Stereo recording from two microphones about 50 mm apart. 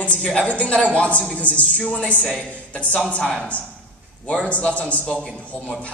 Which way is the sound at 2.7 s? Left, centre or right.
Left.